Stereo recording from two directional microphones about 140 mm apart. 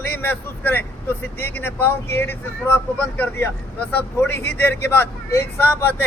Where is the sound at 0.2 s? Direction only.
15° left (ahead or behind).